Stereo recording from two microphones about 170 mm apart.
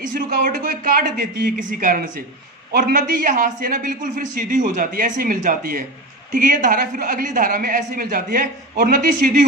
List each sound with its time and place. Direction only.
0.1 s a man's voice: 55° right (ahead or behind)